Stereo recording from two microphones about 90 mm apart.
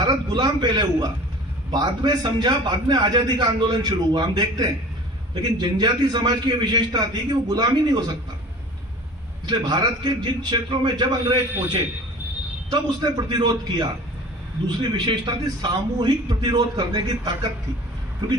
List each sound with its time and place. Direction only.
0.0 s a man's voice: 50° right (ahead or behind)
9.5 s a man's voice: 55° right (ahead or behind)
14.8 s a man's voice: 60° right (ahead or behind)